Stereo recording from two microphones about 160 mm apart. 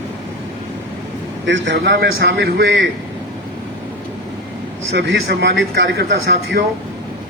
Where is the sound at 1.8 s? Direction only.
90° right.